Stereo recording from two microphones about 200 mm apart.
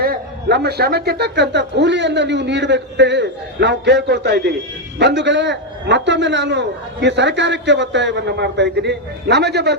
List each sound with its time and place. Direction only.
0.0 s a man's voice: 50° right (ahead or behind)